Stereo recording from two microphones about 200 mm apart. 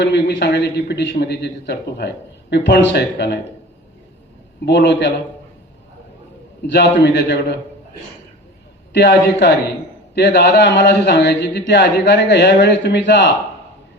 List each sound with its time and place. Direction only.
0.0 s speech: 60° left (ahead or behind)
4.6 s speech: 60° left (ahead or behind)
6.7 s speech: 60° left (ahead or behind)
8.9 s speech: 60° left (ahead or behind)